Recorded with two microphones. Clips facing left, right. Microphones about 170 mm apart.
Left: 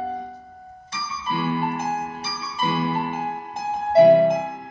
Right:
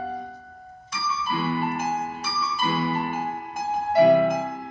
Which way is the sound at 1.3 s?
25° left (ahead or behind).